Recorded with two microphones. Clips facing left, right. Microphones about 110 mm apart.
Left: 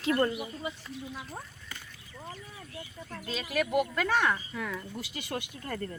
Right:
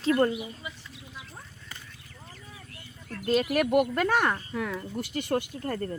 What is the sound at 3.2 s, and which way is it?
Speech, 55° right (ahead or behind).